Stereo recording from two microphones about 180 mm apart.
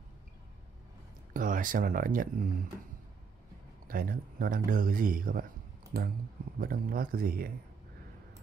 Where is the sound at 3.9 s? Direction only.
50° right (ahead or behind).